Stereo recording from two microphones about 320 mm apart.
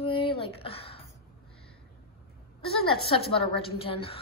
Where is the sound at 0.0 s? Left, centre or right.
Centre.